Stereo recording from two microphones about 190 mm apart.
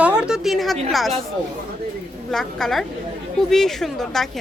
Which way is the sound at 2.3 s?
Centre (ahead or behind).